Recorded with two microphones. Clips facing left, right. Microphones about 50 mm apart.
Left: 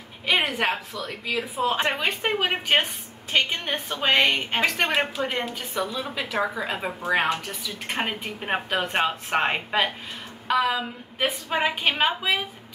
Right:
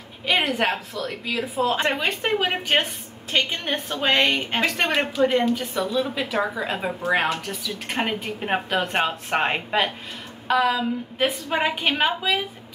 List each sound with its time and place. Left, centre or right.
0.3 s a woman's voice: centre
4.8 s a woman's voice: centre
6.1 s a woman's voice: centre